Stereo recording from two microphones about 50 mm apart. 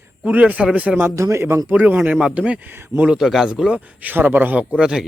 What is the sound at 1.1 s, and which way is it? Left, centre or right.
Speech, right.